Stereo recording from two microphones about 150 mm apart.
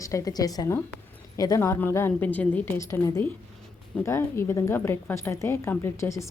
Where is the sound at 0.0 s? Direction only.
20° left (ahead or behind).